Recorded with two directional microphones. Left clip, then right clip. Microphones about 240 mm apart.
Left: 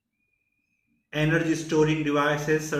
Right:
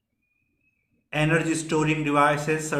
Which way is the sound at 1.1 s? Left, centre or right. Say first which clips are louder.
Right 1 dB; right.